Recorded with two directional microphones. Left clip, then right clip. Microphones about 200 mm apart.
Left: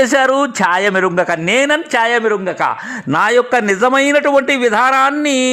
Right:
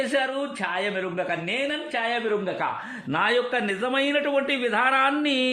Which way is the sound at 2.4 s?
30° left (ahead or behind).